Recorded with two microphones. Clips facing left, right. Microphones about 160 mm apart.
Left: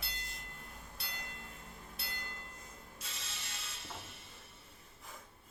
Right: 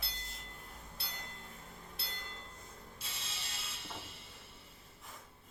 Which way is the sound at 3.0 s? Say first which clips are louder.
Even; 30° right (ahead or behind).